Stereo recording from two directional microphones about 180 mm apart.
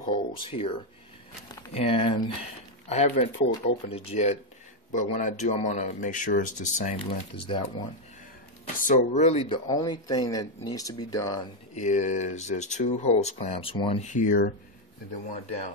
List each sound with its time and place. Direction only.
0.0 s speech: 30° left (ahead or behind)
2.9 s speech: 40° left (ahead or behind)
8.7 s speech: 45° left (ahead or behind)
9.7 s speech: 20° left (ahead or behind)
11.8 s speech: 40° left (ahead or behind)